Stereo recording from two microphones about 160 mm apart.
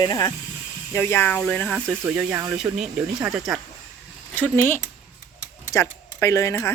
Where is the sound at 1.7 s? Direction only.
10° right (ahead or behind).